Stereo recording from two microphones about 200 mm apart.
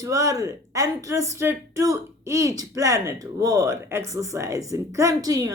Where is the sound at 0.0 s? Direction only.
15° right (ahead or behind).